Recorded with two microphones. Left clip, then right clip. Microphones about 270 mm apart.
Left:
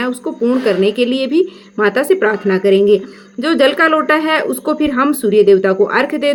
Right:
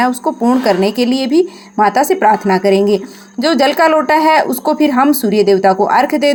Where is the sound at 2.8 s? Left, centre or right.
Right.